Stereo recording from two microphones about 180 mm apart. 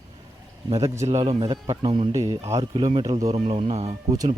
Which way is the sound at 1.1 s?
20° right (ahead or behind).